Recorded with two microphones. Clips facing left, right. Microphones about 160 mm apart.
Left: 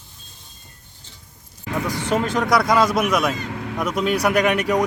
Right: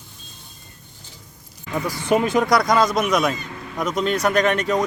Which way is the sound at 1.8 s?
10° right (ahead or behind).